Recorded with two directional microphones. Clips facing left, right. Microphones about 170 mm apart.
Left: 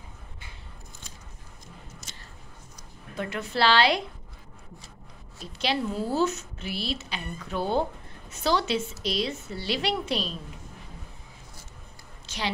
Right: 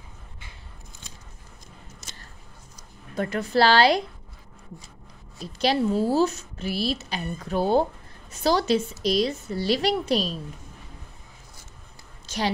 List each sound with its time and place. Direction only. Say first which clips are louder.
3.2 s speech: right 5 dB; 40° right (ahead or behind)
5.6 s speech: right 6 dB; 40° right (ahead or behind)